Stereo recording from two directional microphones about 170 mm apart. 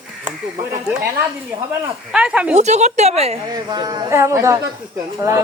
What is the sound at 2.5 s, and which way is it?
Speech, 40° right (ahead or behind).